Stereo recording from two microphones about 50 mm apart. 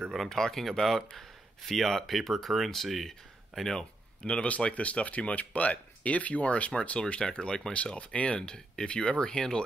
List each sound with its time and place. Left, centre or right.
0.3 s speech: centre
4.3 s speech: left